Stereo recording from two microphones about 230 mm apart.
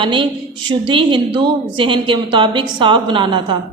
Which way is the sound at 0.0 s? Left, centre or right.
Right.